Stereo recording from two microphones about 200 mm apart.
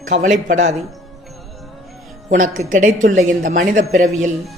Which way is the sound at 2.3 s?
40° right (ahead or behind).